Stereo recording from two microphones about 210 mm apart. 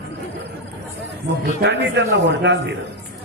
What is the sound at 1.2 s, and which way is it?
A man's voice, 55° right (ahead or behind).